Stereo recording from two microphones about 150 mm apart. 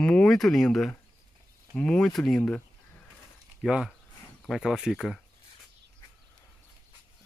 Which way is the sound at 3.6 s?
5° right (ahead or behind).